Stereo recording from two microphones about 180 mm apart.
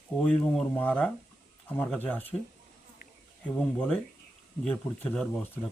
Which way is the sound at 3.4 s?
5° left (ahead or behind).